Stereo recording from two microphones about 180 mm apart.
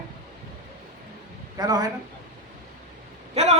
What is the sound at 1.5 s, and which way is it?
Speech, 20° right (ahead or behind).